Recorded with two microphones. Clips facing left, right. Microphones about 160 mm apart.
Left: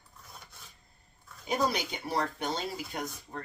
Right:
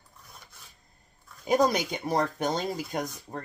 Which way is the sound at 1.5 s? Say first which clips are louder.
Right 6 dB; 40° right (ahead or behind).